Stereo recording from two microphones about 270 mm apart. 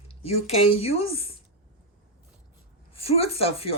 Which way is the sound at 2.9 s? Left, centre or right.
Left.